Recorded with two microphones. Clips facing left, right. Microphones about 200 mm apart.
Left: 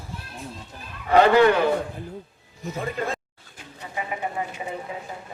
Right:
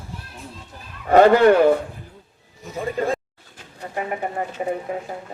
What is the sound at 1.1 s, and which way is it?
Speech, 45° right (ahead or behind).